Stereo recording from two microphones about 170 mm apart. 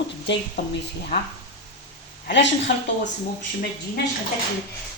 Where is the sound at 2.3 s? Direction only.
90° left.